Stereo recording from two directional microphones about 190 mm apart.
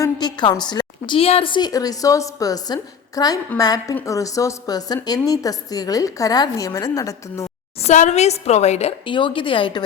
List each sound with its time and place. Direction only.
0.0 s a woman's voice: 20° left (ahead or behind)
7.8 s a woman's voice: 40° left (ahead or behind)